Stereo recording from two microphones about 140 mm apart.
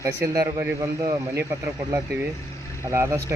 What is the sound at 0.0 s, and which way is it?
Speech, 25° right (ahead or behind).